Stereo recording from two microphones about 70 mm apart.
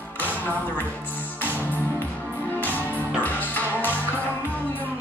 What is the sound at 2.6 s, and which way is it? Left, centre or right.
Music, left.